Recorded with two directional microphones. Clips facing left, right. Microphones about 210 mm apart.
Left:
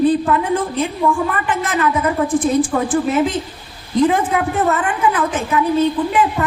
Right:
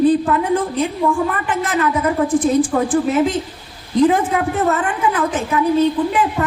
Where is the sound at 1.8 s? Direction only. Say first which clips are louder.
Even; 40° right (ahead or behind).